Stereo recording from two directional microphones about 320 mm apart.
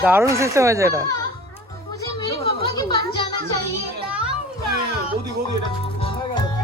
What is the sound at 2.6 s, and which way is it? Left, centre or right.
Music, centre.